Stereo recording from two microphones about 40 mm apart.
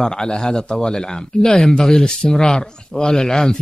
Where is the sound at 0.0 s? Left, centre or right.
Centre.